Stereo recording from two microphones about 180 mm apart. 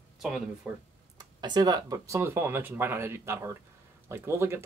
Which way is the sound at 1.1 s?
25° right (ahead or behind).